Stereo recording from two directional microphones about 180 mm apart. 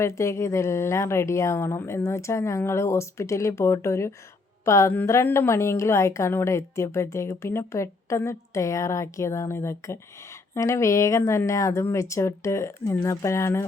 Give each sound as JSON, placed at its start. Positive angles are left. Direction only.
{"t": 0.0, "sound": "a woman's voice", "side_deg": 15}